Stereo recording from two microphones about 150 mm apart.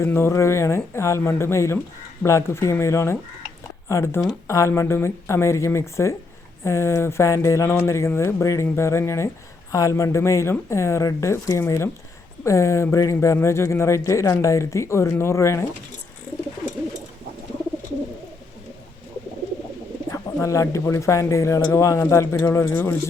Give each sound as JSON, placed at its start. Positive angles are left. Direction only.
{"t": 0.0, "sound": "speech", "side_deg": 15}
{"t": 20.1, "sound": "speech", "side_deg": 20}